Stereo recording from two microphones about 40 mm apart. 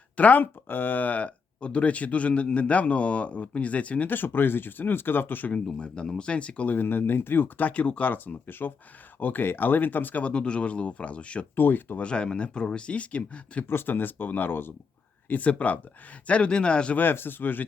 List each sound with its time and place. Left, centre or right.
0.2 s speech: left
0.7 s speech: left
4.1 s speech: left
5.7 s speech: left
6.7 s speech: left
7.6 s speech: left
8.1 s speech: left
10.2 s speech: left
11.5 s speech: left
11.9 s speech: left
13.7 s speech: left
15.3 s speech: left
17.0 s speech: left